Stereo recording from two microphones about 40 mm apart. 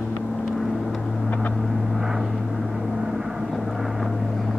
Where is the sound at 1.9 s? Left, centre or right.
Centre.